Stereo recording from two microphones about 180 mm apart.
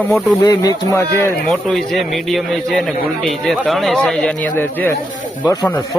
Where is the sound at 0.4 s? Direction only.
20° left (ahead or behind).